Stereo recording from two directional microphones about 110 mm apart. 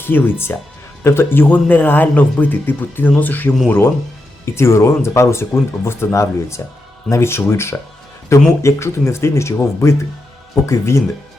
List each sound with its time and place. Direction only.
0.0 s speech: 20° left (ahead or behind)